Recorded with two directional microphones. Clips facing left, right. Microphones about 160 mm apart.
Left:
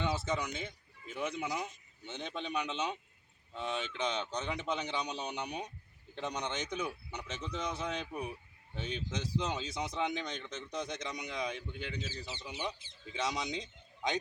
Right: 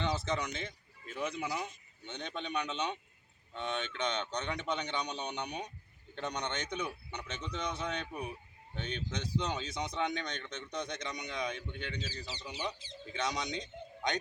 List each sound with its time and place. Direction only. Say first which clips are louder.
0.0 s speech: even; 5° left (ahead or behind)
12.0 s speech: even; 20° left (ahead or behind)
13.1 s a man's voice: even; 5° left (ahead or behind)